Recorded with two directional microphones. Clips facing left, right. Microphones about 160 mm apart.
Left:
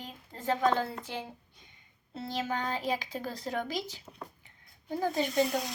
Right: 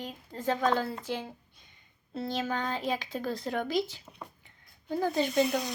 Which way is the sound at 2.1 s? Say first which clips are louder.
Right 2 dB; 15° left (ahead or behind).